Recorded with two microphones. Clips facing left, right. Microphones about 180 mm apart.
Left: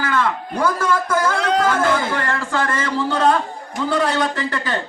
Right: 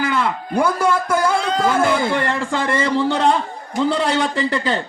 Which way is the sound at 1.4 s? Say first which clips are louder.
Left 2 dB; 75° left (ahead or behind).